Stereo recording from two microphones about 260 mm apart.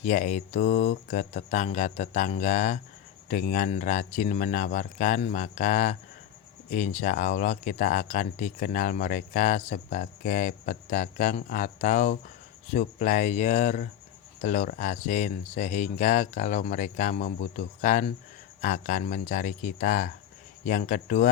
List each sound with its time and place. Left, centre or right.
0.0 s speech: left